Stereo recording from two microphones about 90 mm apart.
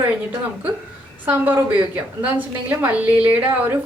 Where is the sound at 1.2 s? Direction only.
20° right (ahead or behind).